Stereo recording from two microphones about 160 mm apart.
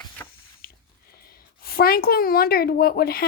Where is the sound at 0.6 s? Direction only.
70° left (ahead or behind).